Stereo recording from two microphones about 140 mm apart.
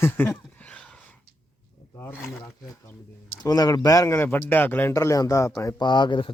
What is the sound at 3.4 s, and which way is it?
Speech, 25° left (ahead or behind).